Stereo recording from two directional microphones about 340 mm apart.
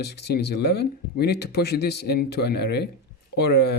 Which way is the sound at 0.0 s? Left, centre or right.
Left.